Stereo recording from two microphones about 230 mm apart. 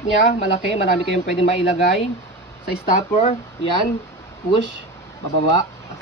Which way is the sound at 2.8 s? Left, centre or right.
Left.